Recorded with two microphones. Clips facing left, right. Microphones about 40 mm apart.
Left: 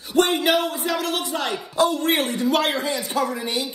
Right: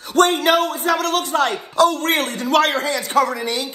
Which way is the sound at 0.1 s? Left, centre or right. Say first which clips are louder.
Right 4 dB; right.